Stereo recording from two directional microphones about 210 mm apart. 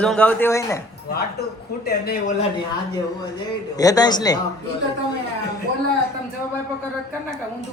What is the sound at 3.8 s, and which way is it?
Speech, 20° left (ahead or behind).